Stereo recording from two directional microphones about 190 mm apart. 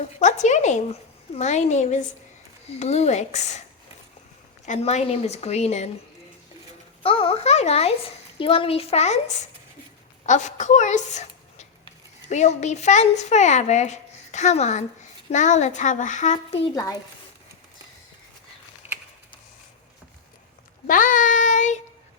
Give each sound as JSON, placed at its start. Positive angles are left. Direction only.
{"t": 0.2, "sound": "a woman's voice", "side_deg": 40}
{"t": 4.6, "sound": "a child's voice", "side_deg": 40}
{"t": 7.0, "sound": "a child's voice", "side_deg": 30}
{"t": 20.8, "sound": "child singing", "side_deg": 45}